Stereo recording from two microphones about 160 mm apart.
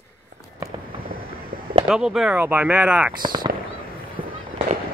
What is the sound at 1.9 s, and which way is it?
Speech, 5° right (ahead or behind).